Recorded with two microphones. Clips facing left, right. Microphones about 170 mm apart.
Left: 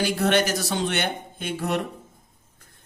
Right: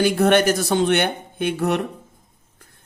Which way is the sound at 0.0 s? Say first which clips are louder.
Right 6 dB; 55° right (ahead or behind).